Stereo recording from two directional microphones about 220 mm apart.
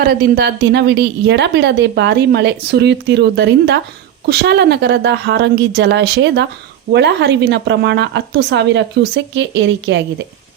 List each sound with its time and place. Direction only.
0.0 s a woman's voice: 45° right (ahead or behind)